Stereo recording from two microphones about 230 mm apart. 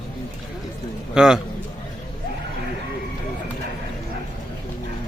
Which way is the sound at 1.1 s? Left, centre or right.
Centre.